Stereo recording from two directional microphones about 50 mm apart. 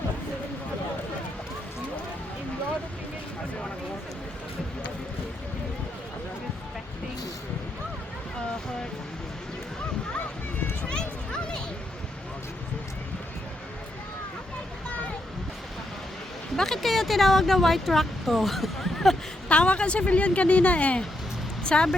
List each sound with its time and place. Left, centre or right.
10.8 s a sound: centre
16.6 s speech: centre
19.5 s speech: left